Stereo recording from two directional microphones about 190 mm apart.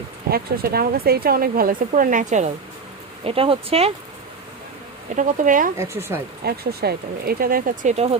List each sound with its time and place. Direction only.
0.3 s speech: 55° right (ahead or behind)
3.2 s speech: 30° right (ahead or behind)
5.1 s speech: 45° right (ahead or behind)
5.7 s speech: 15° right (ahead or behind)
6.4 s speech: 55° right (ahead or behind); by 8.2 s 35° right (ahead or behind)